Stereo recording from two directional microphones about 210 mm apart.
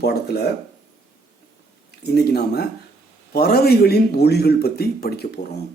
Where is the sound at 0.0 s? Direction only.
50° left (ahead or behind).